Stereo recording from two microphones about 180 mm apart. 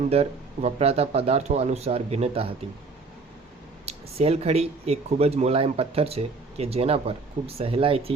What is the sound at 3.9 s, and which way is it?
Speech, 35° right (ahead or behind).